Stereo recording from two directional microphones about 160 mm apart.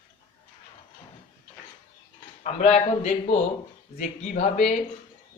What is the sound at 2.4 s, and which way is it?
Speech, 45° left (ahead or behind).